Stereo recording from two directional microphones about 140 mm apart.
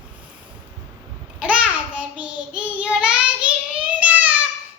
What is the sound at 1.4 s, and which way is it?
Child singing, 10° right (ahead or behind).